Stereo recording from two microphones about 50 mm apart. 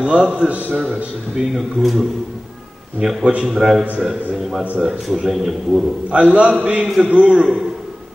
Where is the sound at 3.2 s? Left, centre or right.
Right.